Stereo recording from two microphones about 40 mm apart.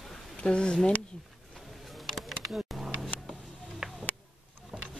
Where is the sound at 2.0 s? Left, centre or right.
Centre.